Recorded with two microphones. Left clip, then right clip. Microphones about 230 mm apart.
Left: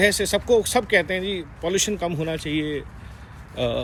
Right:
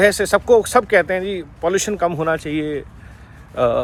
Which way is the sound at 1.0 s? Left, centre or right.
Right.